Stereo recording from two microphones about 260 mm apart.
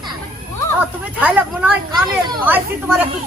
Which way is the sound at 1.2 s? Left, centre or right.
Centre.